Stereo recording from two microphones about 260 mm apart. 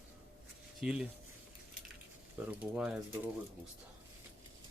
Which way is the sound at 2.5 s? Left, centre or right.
Centre.